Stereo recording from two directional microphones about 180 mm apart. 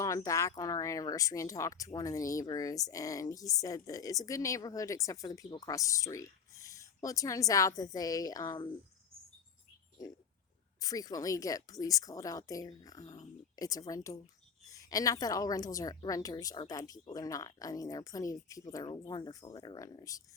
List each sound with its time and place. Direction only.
0.3 s speech: 15° left (ahead or behind)
10.8 s speech: 20° left (ahead or behind)